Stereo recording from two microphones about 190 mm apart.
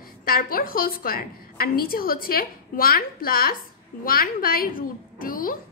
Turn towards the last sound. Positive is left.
turn(degrees=45)  # may be behind; listen again after turning